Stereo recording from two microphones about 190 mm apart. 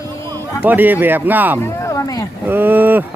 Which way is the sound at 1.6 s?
15° left (ahead or behind).